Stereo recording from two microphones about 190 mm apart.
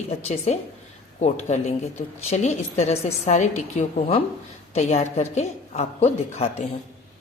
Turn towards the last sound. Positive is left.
turn(degrees=35)  # may be behind; listen again after turning